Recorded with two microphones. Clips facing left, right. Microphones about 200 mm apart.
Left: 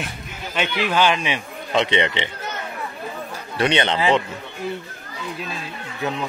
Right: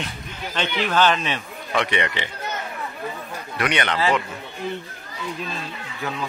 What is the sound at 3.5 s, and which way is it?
Speech, 25° left (ahead or behind).